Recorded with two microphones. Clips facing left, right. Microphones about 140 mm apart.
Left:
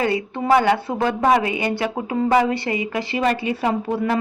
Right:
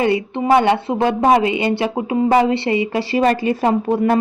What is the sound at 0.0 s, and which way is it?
A woman's voice, 20° right (ahead or behind).